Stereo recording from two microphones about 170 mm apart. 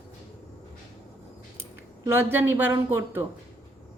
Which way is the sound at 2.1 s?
15° right (ahead or behind).